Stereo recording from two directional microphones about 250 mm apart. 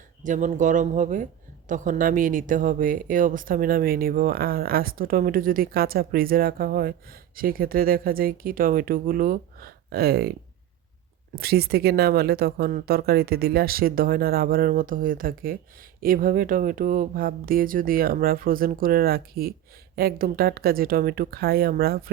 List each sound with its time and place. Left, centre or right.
0.2 s speech: right
11.3 s speech: right